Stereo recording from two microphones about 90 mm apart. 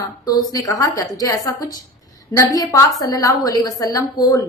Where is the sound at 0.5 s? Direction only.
40° left (ahead or behind).